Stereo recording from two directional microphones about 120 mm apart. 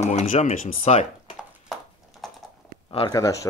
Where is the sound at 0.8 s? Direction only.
65° left (ahead or behind).